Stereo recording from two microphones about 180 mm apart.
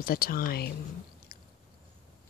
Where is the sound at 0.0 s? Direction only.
55° left (ahead or behind).